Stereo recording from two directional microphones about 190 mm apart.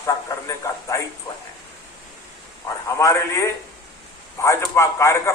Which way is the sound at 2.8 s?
15° left (ahead or behind).